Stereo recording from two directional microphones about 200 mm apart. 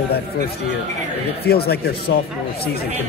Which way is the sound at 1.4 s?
50° left (ahead or behind).